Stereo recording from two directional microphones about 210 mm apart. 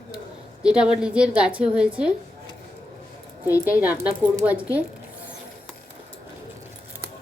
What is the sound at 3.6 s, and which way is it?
Speech, 5° right (ahead or behind).